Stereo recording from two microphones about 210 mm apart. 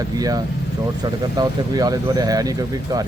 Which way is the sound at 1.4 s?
20° right (ahead or behind).